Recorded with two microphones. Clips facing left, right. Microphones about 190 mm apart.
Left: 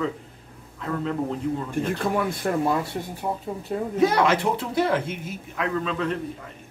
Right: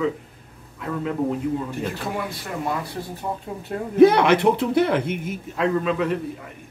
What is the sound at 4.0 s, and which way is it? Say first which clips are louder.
Speech: right 7 dB; 60° right (ahead or behind).